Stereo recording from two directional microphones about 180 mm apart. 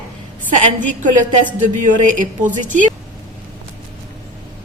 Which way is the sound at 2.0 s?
45° right (ahead or behind).